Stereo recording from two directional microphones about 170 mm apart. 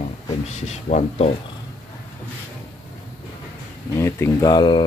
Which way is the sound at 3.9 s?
15° left (ahead or behind).